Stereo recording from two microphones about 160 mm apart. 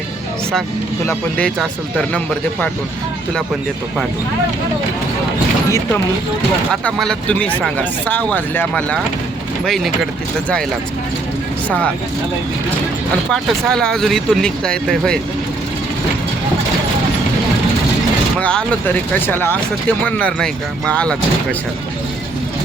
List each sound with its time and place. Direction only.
1.0 s speech: 5° left (ahead or behind)
5.6 s speech: 20° left (ahead or behind)
6.8 s speech: 5° left (ahead or behind)
13.3 s speech: centre (ahead or behind)
18.3 s speech: 10° left (ahead or behind)